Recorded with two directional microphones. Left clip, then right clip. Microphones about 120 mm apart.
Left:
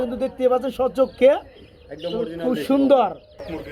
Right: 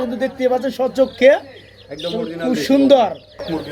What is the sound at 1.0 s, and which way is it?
Speech, 25° left (ahead or behind).